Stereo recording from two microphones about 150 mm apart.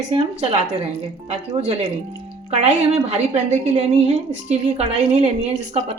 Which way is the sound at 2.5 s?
45° right (ahead or behind).